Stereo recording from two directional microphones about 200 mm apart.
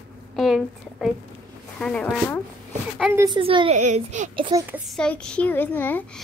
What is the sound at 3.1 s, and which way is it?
Speech, 15° right (ahead or behind).